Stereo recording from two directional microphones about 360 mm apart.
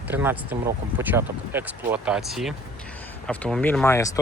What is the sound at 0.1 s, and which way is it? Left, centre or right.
Speech, centre.